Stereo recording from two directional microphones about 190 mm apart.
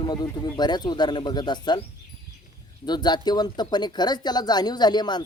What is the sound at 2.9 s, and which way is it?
Speech, 20° left (ahead or behind).